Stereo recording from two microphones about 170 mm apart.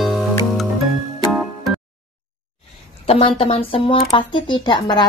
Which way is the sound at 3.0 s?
35° left (ahead or behind).